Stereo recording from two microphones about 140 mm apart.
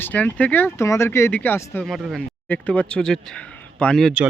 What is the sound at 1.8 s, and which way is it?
A man's voice, centre (ahead or behind).